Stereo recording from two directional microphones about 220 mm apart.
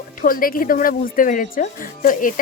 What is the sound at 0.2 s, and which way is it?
Speech, 40° left (ahead or behind).